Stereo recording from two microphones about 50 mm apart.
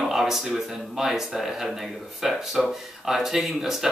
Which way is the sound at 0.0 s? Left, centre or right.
Centre.